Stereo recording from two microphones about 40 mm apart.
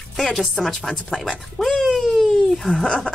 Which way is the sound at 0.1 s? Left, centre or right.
Centre.